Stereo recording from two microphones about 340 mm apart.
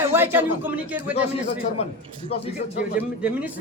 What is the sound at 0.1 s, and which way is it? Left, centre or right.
A man's voice, centre.